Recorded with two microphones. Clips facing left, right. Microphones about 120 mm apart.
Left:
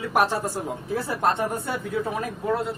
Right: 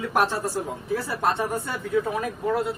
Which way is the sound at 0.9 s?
20° left (ahead or behind).